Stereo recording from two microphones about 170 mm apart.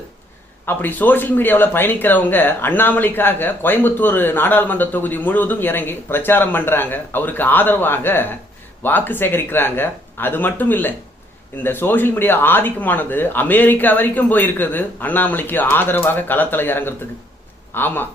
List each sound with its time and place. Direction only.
0.6 s speech: 10° left (ahead or behind)